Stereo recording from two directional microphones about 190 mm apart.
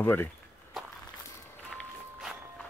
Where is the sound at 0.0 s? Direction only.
10° left (ahead or behind).